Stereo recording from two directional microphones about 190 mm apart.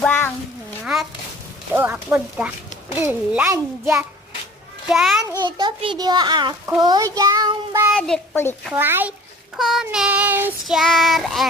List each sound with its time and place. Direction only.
0.0 s a sound: 10° left (ahead or behind)
1.7 s a child's voice: 10° right (ahead or behind)
4.9 s child singing: 5° right (ahead or behind)
5.4 s a child's voice: 25° right (ahead or behind)
6.7 s child singing: 20° right (ahead or behind)
7.9 s a child's voice: centre (ahead or behind)
8.7 s a child's voice: 10° right (ahead or behind)
9.6 s child singing: centre (ahead or behind)